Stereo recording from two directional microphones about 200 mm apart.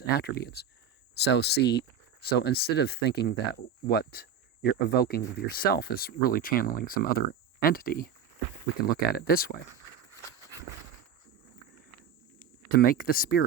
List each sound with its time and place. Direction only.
0.0 s speech: 50° left (ahead or behind)
9.1 s speech: 50° left (ahead or behind)
12.4 s speech: 45° left (ahead or behind)